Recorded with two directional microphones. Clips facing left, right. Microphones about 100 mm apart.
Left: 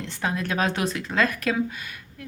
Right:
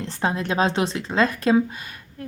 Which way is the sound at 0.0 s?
30° right (ahead or behind).